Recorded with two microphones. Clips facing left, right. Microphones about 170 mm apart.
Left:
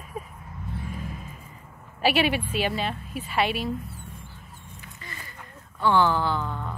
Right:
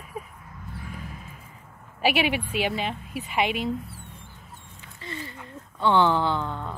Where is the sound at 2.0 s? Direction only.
15° right (ahead or behind).